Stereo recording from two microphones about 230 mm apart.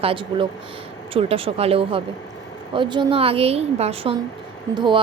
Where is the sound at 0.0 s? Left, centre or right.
Right.